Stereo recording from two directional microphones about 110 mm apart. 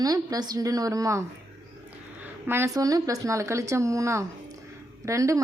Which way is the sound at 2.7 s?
35° right (ahead or behind).